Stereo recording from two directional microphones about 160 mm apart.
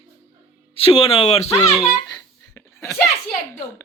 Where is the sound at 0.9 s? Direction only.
35° left (ahead or behind).